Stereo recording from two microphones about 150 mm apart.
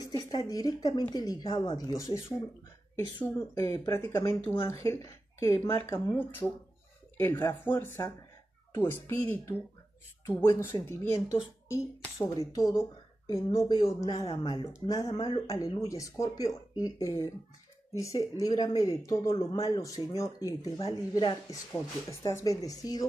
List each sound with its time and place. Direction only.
0.0 s a woman's voice: 25° left (ahead or behind)